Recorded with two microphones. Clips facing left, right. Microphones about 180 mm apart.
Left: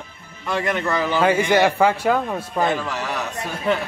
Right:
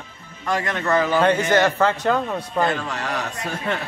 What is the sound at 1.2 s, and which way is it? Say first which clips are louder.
A man's voice: left 5 dB; 10° left (ahead or behind).